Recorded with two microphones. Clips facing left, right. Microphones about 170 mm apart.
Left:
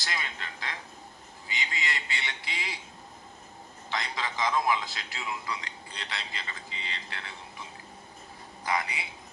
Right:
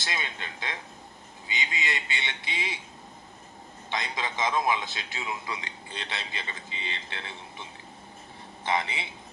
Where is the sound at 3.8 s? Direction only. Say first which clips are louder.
Right 1 dB; 20° right (ahead or behind).